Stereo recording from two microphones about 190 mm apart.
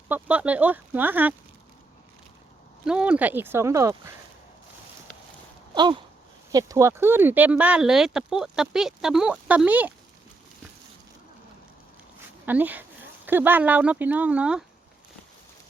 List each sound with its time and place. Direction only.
0.1 s speech: 5° right (ahead or behind)
2.8 s speech: 5° right (ahead or behind)
5.7 s a sound: 25° right (ahead or behind)
6.5 s speech: 20° right (ahead or behind)
12.5 s speech: 10° right (ahead or behind)